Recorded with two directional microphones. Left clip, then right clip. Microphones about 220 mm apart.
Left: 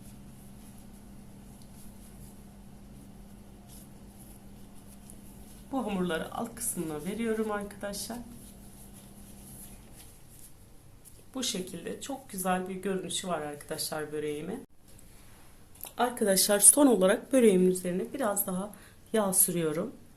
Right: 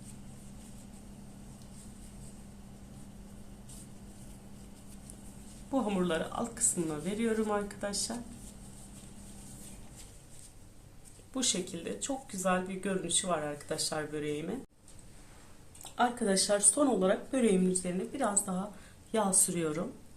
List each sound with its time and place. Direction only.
5.7 s speech: centre (ahead or behind)
11.3 s speech: 5° left (ahead or behind)
15.8 s speech: 40° left (ahead or behind)
17.8 s speech: 30° left (ahead or behind)